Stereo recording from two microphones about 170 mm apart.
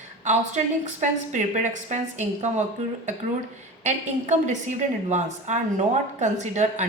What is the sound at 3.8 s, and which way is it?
Speech, 45° right (ahead or behind).